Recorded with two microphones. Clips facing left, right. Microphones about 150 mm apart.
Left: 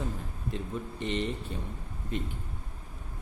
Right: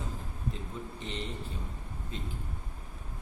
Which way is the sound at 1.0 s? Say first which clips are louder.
Left 9 dB; 65° left (ahead or behind).